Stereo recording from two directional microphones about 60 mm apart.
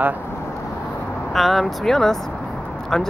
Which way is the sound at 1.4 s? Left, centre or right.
Centre.